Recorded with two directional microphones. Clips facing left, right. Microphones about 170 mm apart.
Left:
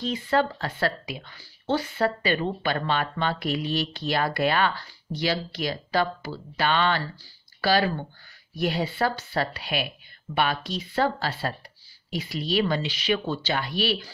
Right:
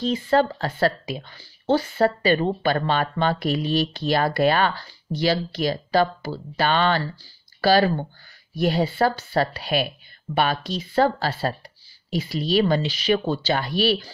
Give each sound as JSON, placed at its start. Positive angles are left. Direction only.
{"t": 0.0, "sound": "speech", "side_deg": -30}